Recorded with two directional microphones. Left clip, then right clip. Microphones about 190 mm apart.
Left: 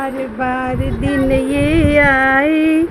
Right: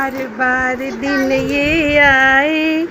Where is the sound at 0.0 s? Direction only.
Centre (ahead or behind).